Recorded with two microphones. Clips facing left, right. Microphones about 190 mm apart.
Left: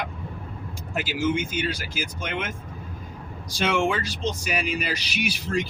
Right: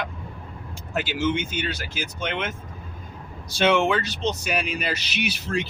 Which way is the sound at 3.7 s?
10° left (ahead or behind).